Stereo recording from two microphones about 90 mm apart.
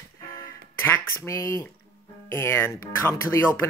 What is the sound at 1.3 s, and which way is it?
Speech, 35° left (ahead or behind).